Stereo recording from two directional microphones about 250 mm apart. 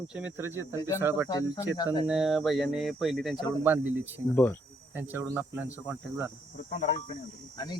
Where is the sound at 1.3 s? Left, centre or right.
Centre.